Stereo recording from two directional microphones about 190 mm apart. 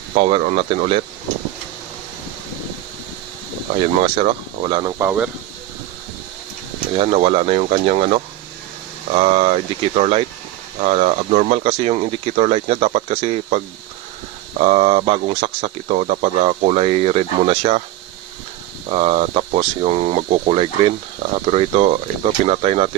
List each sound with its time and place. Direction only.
0.1 s speech: 35° right (ahead or behind)
4.0 s speech: 30° right (ahead or behind)
5.0 s speech: 10° right (ahead or behind)
7.0 s speech: 30° right (ahead or behind)
14.6 s speech: 35° right (ahead or behind)
18.9 s speech: 30° right (ahead or behind)